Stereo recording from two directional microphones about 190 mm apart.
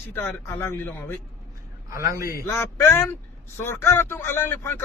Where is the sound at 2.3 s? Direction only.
15° left (ahead or behind).